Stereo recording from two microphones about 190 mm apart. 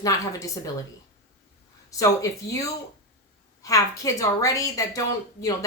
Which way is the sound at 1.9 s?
15° left (ahead or behind).